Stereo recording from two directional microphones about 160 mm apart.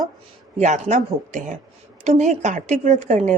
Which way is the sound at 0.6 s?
45° right (ahead or behind).